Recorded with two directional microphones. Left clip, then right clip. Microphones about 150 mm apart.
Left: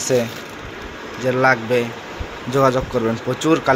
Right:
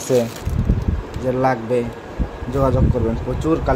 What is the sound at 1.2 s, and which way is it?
Speech, 10° right (ahead or behind).